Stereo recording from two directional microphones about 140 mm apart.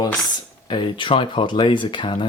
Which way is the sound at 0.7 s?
35° left (ahead or behind).